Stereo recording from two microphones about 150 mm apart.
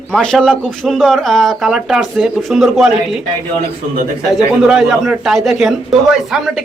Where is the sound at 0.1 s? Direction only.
5° left (ahead or behind).